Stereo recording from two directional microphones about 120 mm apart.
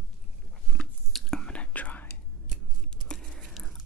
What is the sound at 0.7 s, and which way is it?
Whispering, 5° left (ahead or behind).